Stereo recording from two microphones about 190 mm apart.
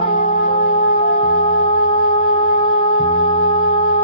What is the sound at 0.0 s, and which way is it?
Music, 30° left (ahead or behind).